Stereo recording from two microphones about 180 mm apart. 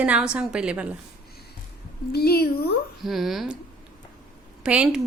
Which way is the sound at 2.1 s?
60° left (ahead or behind).